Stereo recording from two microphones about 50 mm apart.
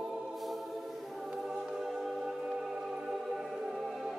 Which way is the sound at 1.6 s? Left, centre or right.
Centre.